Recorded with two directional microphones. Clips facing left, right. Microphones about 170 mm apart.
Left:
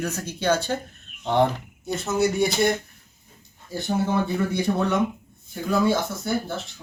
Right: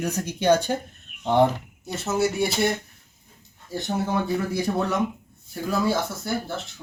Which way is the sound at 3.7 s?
Centre (ahead or behind).